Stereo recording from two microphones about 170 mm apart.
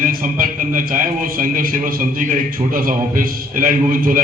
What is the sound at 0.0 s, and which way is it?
A man's voice, 55° right (ahead or behind).